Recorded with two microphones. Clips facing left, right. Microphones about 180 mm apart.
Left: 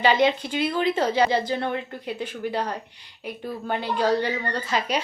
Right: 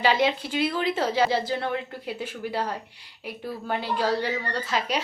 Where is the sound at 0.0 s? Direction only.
5° right (ahead or behind).